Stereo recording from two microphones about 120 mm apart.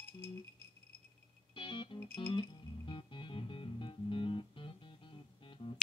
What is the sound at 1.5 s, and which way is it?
Music, 45° left (ahead or behind).